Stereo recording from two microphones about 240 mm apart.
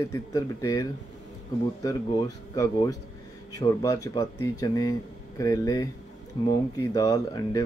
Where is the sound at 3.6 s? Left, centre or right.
Centre.